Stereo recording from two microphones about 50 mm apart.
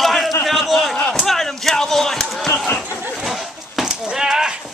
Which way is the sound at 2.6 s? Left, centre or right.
Left.